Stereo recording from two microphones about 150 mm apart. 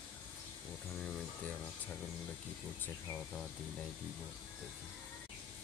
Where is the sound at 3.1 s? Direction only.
Centre (ahead or behind).